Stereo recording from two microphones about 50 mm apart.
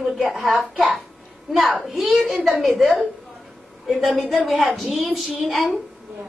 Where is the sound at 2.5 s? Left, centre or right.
Centre.